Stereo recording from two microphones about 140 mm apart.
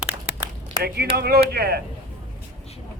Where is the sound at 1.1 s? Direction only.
90° right.